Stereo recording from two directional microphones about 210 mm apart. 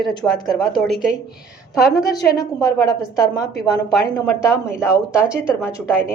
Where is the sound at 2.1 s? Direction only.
15° left (ahead or behind).